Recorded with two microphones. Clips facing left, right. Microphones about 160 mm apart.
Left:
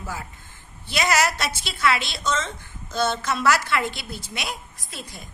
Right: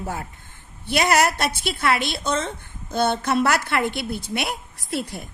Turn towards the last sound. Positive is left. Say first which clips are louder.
# right 11 dB
turn(degrees=-65)  # may be behind; listen again after turning